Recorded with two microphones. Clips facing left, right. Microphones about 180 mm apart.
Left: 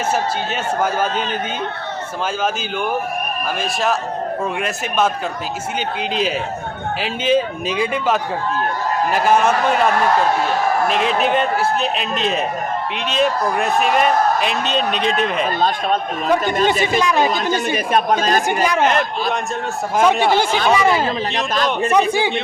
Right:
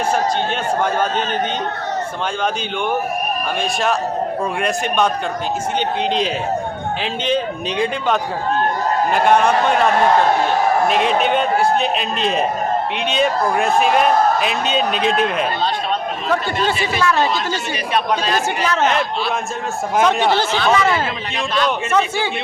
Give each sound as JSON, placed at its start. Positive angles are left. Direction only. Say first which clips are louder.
{"t": 4.6, "sound": "a man's voice", "louder": "right 2 dB", "side_deg": 5}
{"t": 17.0, "sound": "speech", "louder": "right 3 dB", "side_deg": 15}
{"t": 17.3, "sound": "speech", "louder": "left 3 dB", "side_deg": 50}
{"t": 18.6, "sound": "speech", "louder": "even", "side_deg": 15}
{"t": 20.1, "sound": "speech", "louder": "left 4 dB", "side_deg": 10}
{"t": 21.5, "sound": "a man's voice", "louder": "even", "side_deg": 40}
{"t": 21.9, "sound": "speech", "louder": "left 3 dB", "side_deg": 15}